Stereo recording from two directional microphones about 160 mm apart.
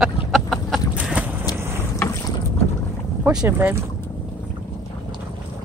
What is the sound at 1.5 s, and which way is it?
Vehicle, 15° left (ahead or behind).